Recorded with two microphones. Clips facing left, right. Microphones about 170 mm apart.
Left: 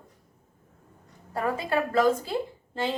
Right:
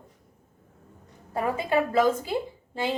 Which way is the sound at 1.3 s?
15° right (ahead or behind).